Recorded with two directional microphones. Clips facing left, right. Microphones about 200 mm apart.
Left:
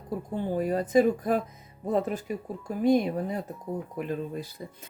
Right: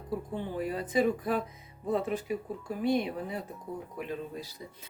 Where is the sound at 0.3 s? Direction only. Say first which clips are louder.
Left 8 dB; 45° left (ahead or behind).